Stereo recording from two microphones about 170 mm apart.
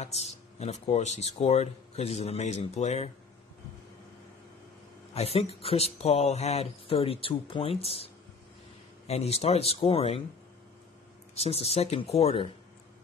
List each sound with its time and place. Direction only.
0.0 s speech: 40° left (ahead or behind)
5.1 s speech: 35° left (ahead or behind)
11.3 s speech: 35° left (ahead or behind)